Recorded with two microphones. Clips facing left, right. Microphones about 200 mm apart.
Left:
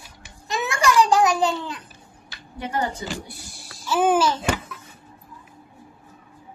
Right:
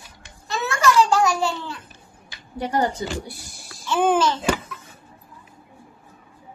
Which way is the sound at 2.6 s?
35° right (ahead or behind).